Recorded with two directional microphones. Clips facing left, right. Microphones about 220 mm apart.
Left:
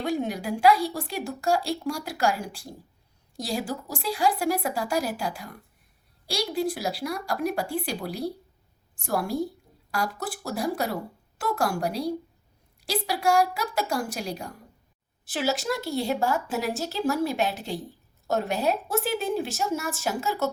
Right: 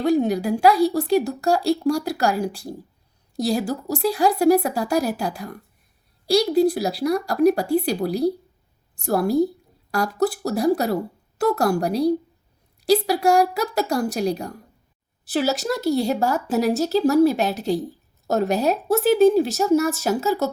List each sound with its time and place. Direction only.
0.0 s speech: 40° right (ahead or behind)